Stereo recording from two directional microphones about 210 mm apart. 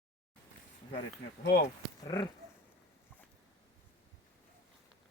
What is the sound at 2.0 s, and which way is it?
Dog, 20° left (ahead or behind).